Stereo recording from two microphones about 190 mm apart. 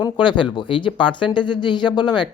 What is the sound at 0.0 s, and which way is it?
Speech, 25° left (ahead or behind).